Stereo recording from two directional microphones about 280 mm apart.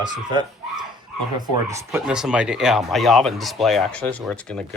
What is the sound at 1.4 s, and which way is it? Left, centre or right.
Speech, centre.